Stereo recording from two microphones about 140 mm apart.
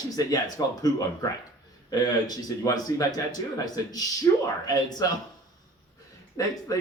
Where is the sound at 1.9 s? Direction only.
30° left (ahead or behind).